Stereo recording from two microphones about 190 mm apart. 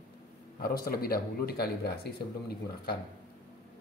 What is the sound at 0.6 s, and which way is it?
Speech, 50° left (ahead or behind).